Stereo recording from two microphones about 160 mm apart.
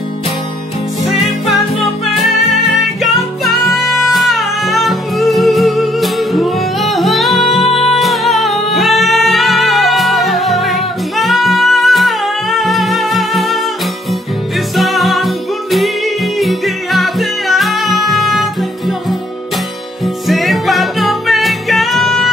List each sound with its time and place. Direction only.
2.1 s music: centre (ahead or behind)
14.8 s music: centre (ahead or behind)
20.2 s music: centre (ahead or behind)